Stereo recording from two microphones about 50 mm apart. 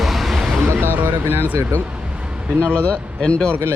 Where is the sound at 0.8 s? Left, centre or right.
Right.